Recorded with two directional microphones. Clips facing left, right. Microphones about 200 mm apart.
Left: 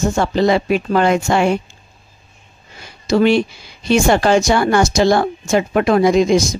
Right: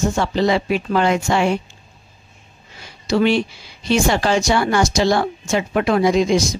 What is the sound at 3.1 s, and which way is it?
A woman's voice, 45° left (ahead or behind).